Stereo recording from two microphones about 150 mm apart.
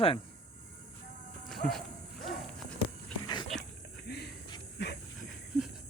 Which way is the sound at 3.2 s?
30° left (ahead or behind).